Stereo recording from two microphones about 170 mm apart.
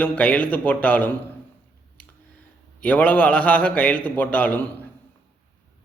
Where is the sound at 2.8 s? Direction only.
10° left (ahead or behind).